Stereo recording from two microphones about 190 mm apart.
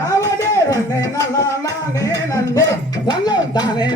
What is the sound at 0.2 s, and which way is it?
Music, 20° left (ahead or behind).